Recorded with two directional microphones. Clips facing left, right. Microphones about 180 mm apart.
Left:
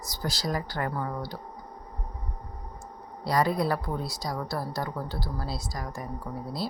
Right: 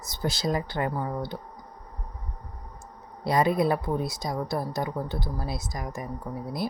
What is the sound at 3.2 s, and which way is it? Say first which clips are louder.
A woman's voice: right 3 dB; 20° right (ahead or behind).